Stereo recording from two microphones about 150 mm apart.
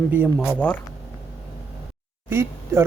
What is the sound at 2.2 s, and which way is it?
Speech, 15° right (ahead or behind).